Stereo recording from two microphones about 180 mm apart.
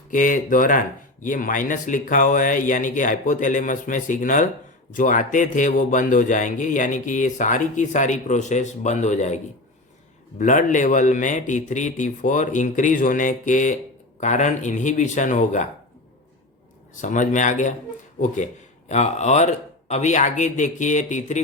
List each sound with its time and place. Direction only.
0.1 s speech: 45° left (ahead or behind)
16.9 s speech: 45° left (ahead or behind)
18.9 s speech: 40° left (ahead or behind)